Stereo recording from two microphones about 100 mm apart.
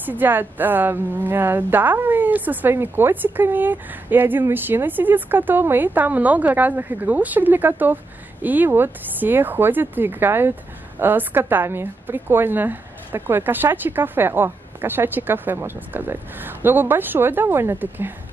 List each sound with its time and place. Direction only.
0.0 s a woman's voice: 20° right (ahead or behind)